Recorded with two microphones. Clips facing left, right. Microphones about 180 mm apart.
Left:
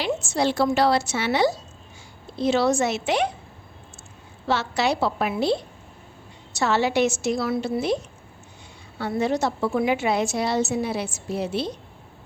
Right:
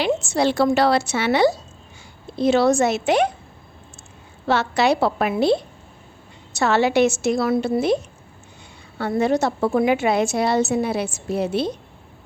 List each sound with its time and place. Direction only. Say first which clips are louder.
0.0 s a woman's voice: right 4 dB; 65° right (ahead or behind)
4.4 s a woman's voice: right 4 dB; 55° right (ahead or behind)
6.6 s a woman's voice: right 4 dB; 60° right (ahead or behind)
9.0 s a woman's voice: right 4 dB; 55° right (ahead or behind)